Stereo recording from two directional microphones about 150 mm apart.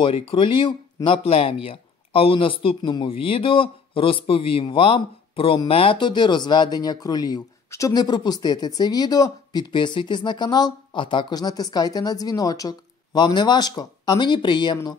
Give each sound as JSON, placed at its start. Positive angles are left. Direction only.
{"t": 0.0, "sound": "speech", "side_deg": 35}